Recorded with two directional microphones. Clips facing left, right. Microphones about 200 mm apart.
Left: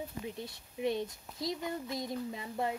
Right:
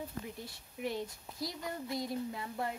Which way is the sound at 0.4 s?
20° left (ahead or behind).